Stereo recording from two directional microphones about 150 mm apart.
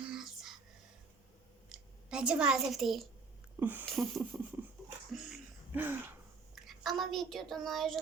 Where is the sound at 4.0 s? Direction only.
20° right (ahead or behind).